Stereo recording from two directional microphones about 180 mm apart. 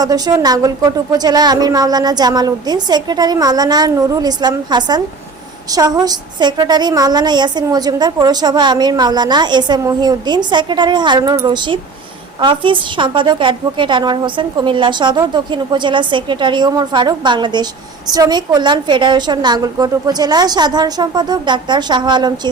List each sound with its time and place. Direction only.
0.0 s a woman's voice: 20° right (ahead or behind)